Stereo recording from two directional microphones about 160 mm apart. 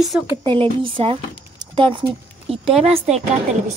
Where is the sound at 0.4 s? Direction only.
30° right (ahead or behind).